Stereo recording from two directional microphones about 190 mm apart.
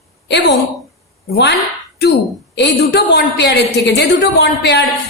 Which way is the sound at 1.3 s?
65° left (ahead or behind).